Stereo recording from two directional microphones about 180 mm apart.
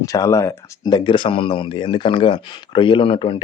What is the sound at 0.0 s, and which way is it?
Speech, 20° left (ahead or behind).